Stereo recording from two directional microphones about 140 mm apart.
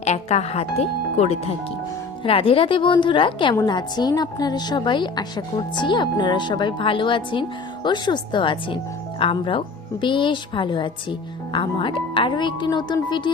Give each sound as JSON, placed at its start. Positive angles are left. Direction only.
{"t": 0.0, "sound": "speech", "side_deg": 50}
{"t": 2.2, "sound": "speech", "side_deg": 40}